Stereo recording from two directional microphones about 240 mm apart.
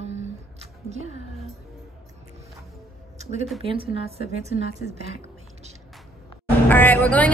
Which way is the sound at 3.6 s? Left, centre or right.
Right.